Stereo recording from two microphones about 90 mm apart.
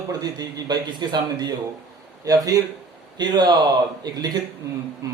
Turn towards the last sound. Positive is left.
turn(degrees=-40)  # may be behind; listen again after turning